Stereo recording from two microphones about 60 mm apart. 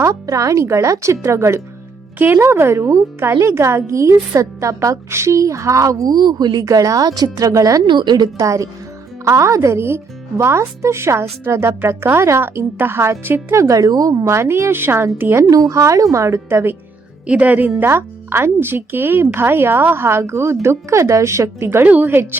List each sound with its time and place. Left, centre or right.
0.0 s a woman's voice: right
2.1 s speech: right
2.4 s speech: right
3.4 s a woman's voice: right
13.6 s speech: right
14.3 s speech: right
15.4 s speech: right
17.2 s a woman's voice: right
17.7 s speech: right
21.8 s a woman's voice: right
22.1 s a woman's voice: right